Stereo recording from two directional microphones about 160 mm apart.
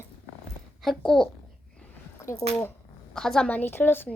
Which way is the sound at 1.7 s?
10° left (ahead or behind).